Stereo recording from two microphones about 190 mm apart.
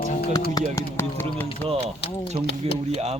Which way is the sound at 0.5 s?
15° left (ahead or behind).